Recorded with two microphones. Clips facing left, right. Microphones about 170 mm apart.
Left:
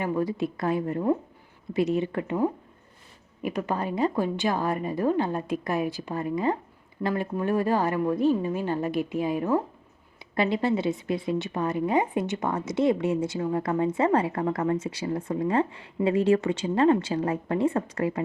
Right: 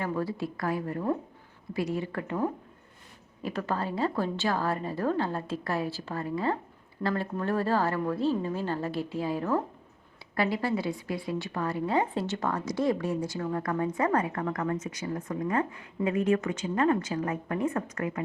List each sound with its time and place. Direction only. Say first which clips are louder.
0.0 s a woman's voice: left 4 dB; 15° left (ahead or behind)